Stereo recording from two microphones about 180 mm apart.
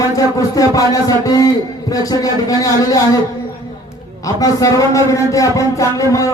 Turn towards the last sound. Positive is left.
turn(degrees=20)  # may be behind; listen again after turning